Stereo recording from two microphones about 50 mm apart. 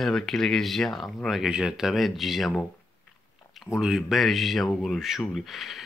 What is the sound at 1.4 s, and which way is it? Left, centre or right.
Speech, centre.